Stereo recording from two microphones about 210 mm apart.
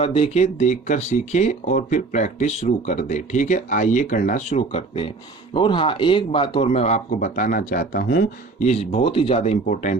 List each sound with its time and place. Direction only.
0.0 s speech: 30° left (ahead or behind)